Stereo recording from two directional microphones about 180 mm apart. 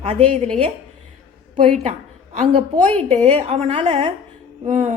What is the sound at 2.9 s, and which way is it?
A woman's voice, 35° right (ahead or behind).